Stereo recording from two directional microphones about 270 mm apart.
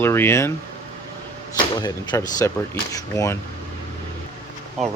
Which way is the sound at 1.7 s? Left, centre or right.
Centre.